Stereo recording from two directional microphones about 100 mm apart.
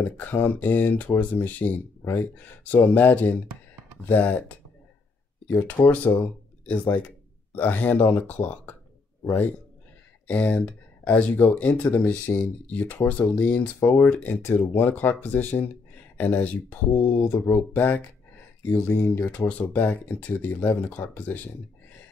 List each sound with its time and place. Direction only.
0.0 s speech: 20° left (ahead or behind)
5.5 s a man's voice: 20° left (ahead or behind)